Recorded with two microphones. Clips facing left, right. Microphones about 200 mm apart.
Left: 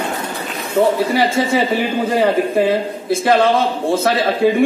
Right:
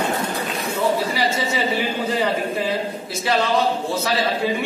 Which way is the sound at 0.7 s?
50° left (ahead or behind).